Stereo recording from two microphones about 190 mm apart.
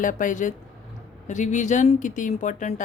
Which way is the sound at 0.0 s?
45° left (ahead or behind).